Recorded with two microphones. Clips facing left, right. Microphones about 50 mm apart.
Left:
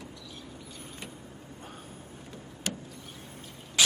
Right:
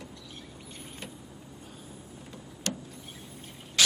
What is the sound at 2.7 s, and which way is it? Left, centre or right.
Vehicle, centre.